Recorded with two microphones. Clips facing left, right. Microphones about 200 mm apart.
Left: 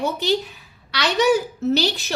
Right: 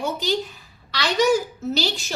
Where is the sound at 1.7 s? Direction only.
60° left (ahead or behind).